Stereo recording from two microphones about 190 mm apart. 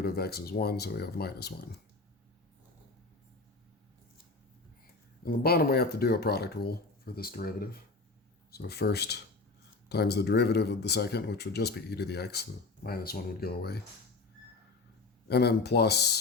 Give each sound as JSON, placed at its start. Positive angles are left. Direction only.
{"t": 0.0, "sound": "speech", "side_deg": 55}
{"t": 5.2, "sound": "speech", "side_deg": 55}
{"t": 15.3, "sound": "speech", "side_deg": 60}